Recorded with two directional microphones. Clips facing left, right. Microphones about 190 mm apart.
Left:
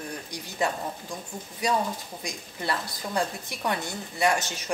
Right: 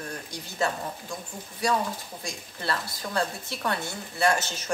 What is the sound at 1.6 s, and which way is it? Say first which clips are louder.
A woman's voice: even; 20° left (ahead or behind).